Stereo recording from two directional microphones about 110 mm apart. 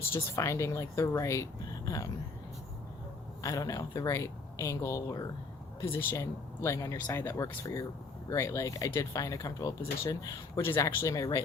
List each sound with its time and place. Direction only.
0.1 s speech: 25° left (ahead or behind)
3.4 s speech: 30° left (ahead or behind)
6.0 s speech: 20° left (ahead or behind)